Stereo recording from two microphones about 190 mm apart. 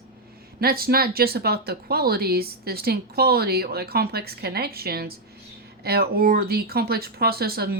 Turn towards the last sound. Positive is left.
turn(degrees=-55)  # may be behind; listen again after turning